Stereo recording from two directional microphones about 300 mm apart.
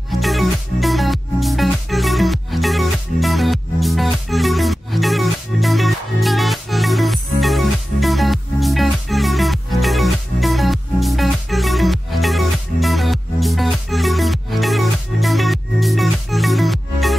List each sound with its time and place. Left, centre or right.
0.1 s music: centre